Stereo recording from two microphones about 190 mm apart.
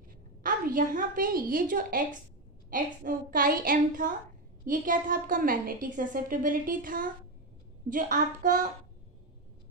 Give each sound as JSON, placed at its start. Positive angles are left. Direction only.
{"t": 0.4, "sound": "a woman's voice", "side_deg": -45}